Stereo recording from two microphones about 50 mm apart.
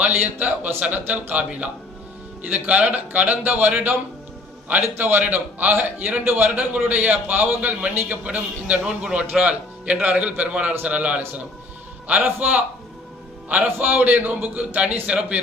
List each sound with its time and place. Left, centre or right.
0.0 s a man's voice: right
4.9 s a man's voice: right
12.2 s a man's voice: right
13.7 s a man's voice: right